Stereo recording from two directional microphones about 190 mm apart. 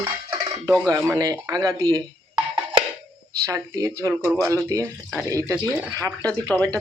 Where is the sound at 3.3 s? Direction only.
15° right (ahead or behind).